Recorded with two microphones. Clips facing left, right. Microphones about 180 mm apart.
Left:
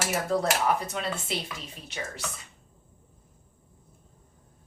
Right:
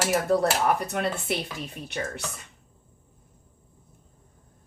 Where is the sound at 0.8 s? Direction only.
60° right (ahead or behind).